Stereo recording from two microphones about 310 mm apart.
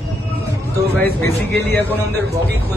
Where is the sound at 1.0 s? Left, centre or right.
Centre.